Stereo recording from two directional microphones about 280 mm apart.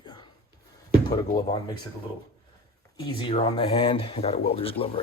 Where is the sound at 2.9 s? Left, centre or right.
Centre.